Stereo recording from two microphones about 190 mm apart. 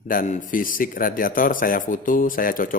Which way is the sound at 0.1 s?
45° left (ahead or behind).